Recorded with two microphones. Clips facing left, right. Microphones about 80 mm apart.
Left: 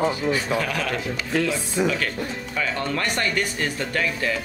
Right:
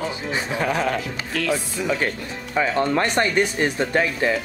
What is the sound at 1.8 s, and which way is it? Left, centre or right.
Speech, right.